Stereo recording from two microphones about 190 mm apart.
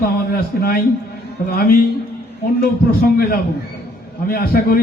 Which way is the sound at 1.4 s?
55° left (ahead or behind).